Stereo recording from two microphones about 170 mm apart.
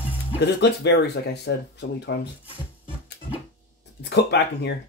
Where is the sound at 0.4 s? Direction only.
85° left.